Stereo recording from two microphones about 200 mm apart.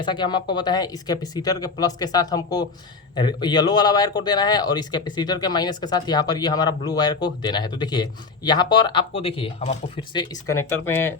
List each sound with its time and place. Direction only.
0.0 s a man's voice: 20° left (ahead or behind)
10.2 s speech: 15° left (ahead or behind)